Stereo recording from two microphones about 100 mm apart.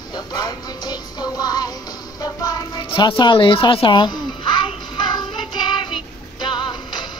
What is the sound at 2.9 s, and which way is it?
Music, 55° left (ahead or behind).